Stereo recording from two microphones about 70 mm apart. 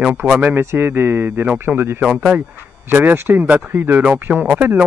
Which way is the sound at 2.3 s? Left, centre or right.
Right.